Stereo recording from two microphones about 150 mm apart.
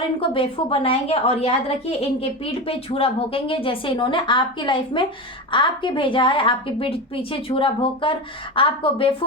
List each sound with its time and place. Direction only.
0.2 s a woman's voice: 35° left (ahead or behind)